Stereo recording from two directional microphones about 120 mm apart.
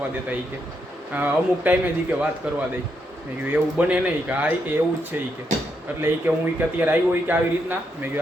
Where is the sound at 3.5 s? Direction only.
10° right (ahead or behind).